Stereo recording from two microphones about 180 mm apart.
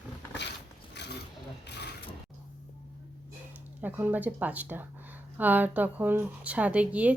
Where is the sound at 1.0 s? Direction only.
70° left (ahead or behind).